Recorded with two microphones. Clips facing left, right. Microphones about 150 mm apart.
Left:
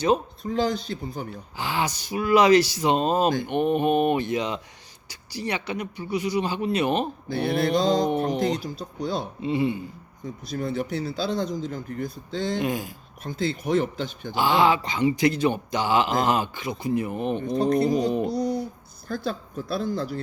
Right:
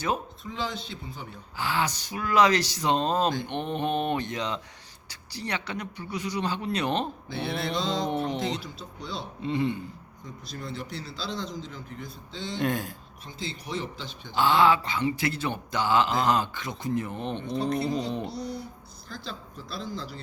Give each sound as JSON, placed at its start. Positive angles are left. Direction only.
{"t": 0.4, "sound": "speech", "side_deg": 40}
{"t": 1.5, "sound": "a man's voice", "side_deg": 15}
{"t": 7.3, "sound": "speech", "side_deg": 45}
{"t": 9.4, "sound": "a man's voice", "side_deg": 10}
{"t": 10.4, "sound": "speech", "side_deg": 55}
{"t": 12.5, "sound": "speech", "side_deg": 5}
{"t": 13.2, "sound": "speech", "side_deg": 55}
{"t": 14.3, "sound": "a man's voice", "side_deg": 15}
{"t": 17.4, "sound": "speech", "side_deg": 45}
{"t": 18.3, "sound": "a sound", "side_deg": 50}
{"t": 19.0, "sound": "speech", "side_deg": 55}